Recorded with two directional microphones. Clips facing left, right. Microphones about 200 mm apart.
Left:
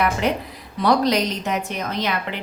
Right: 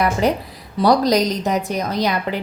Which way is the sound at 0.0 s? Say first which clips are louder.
Right 3 dB; 35° right (ahead or behind).